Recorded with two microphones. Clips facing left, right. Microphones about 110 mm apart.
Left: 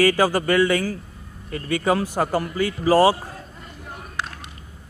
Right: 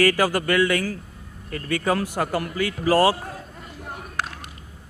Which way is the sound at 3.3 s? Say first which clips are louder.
Right 2 dB; centre (ahead or behind).